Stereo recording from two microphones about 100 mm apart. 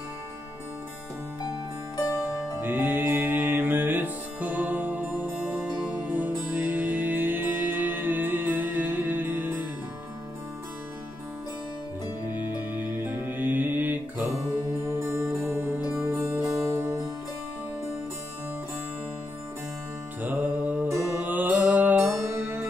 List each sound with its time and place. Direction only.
2.6 s music: 20° right (ahead or behind)
12.4 s music: 40° left (ahead or behind)
13.0 s music: 20° right (ahead or behind)
14.9 s music: 30° right (ahead or behind)
15.5 s music: 15° right (ahead or behind)
20.2 s music: 15° right (ahead or behind)